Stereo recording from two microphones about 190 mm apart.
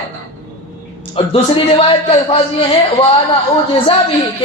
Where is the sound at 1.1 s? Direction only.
30° left (ahead or behind).